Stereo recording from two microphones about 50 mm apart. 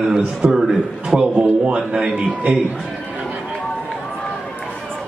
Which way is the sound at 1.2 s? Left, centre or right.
Right.